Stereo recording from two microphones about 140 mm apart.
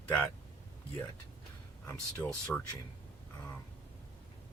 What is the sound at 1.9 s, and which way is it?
Speech, 15° left (ahead or behind).